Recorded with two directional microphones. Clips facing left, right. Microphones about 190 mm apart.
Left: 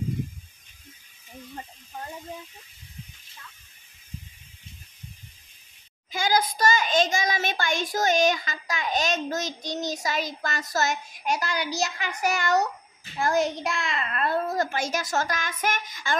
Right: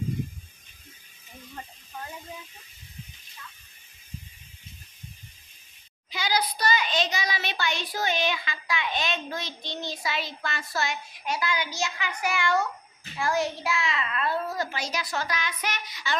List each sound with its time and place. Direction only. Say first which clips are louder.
6.0 s a child's voice: left 4 dB; 50° left (ahead or behind)
13.8 s a child's voice: left 1 dB; 50° left (ahead or behind)